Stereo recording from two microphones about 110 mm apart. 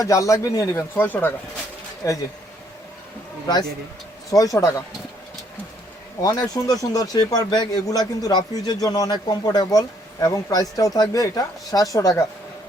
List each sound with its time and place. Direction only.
0.0 s speech: 30° left (ahead or behind)
0.9 s speech: 15° left (ahead or behind)
2.0 s speech: 30° left (ahead or behind)
3.4 s speech: 35° left (ahead or behind)
6.2 s speech: 35° left (ahead or behind)